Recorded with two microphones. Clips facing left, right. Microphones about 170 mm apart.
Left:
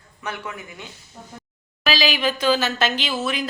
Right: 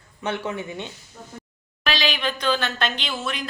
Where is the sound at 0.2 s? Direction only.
25° right (ahead or behind).